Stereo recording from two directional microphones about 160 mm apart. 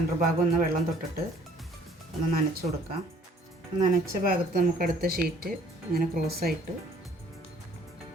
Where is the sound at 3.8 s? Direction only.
60° right (ahead or behind).